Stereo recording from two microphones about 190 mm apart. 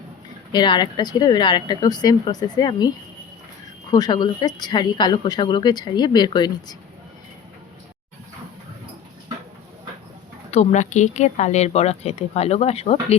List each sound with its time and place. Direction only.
0.5 s a woman's voice: 25° left (ahead or behind)
3.9 s a woman's voice: 20° left (ahead or behind)
10.5 s speech: 35° left (ahead or behind)